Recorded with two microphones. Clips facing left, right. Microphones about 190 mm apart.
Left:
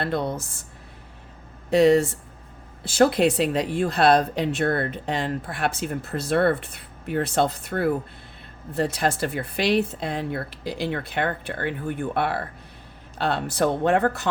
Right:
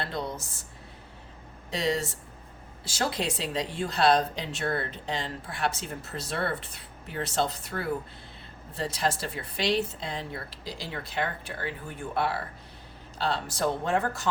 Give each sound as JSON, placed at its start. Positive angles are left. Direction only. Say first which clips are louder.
{"t": 0.0, "sound": "speech", "louder": "left 7 dB", "side_deg": 60}
{"t": 1.7, "sound": "speech", "louder": "left 12 dB", "side_deg": 60}